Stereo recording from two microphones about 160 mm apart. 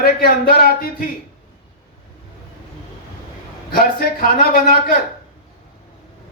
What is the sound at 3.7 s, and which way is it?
Speech, 70° left (ahead or behind).